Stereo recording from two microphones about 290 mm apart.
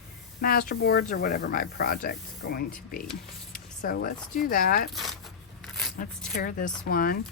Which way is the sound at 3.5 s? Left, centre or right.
Left.